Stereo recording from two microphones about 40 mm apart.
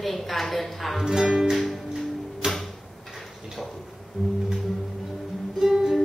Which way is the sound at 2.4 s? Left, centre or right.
Centre.